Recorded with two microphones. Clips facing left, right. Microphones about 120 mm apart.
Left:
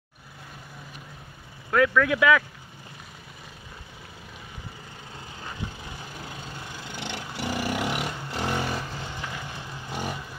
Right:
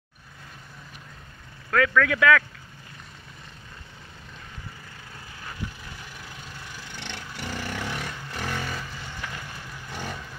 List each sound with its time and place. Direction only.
1.7 s speech: 10° left (ahead or behind)
5.4 s vehicle: 25° left (ahead or behind)